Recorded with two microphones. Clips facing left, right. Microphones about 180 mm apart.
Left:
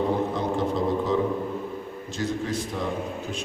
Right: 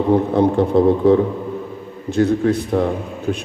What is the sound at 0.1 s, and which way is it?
A man's voice, 60° right (ahead or behind).